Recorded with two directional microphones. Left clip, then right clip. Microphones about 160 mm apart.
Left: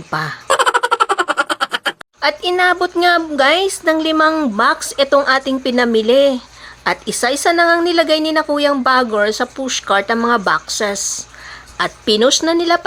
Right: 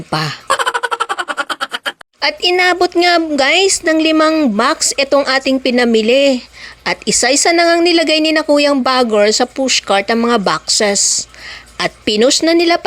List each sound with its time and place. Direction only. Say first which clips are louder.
0.1 s speech: right 2 dB; 50° right (ahead or behind)
0.4 s a sound: left 4 dB; centre (ahead or behind)
2.2 s speech: right 2 dB; 50° right (ahead or behind)
4.4 s speech: right 3 dB; 35° right (ahead or behind)
4.7 s speech: right 1 dB; 45° right (ahead or behind)